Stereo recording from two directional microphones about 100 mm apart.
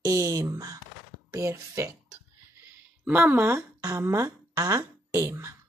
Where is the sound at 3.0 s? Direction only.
20° right (ahead or behind).